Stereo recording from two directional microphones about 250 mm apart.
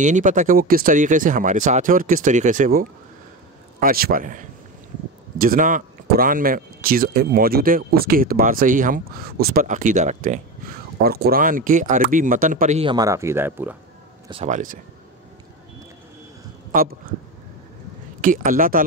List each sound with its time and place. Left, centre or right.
0.0 s speech: right; by 13.7 s centre
14.2 s speech: right
16.7 s speech: right
18.2 s speech: right